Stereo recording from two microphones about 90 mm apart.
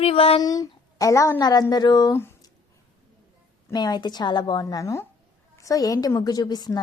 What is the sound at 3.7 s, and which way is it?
A woman's voice, 50° left (ahead or behind).